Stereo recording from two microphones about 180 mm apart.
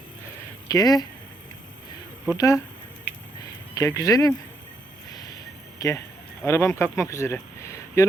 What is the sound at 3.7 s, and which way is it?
Speech, 20° left (ahead or behind).